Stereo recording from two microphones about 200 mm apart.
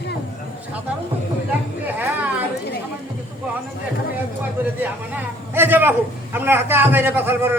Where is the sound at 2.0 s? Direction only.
10° right (ahead or behind).